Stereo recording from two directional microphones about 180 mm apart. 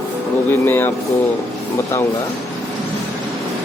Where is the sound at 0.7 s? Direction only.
15° left (ahead or behind).